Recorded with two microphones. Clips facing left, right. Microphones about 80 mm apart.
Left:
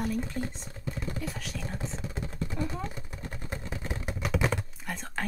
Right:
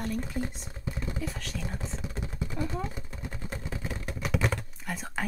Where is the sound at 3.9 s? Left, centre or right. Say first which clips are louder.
Left 1 dB; centre.